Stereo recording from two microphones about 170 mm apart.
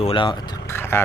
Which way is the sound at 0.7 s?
15° left (ahead or behind).